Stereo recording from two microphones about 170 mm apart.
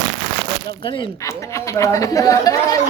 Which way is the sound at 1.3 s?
15° left (ahead or behind).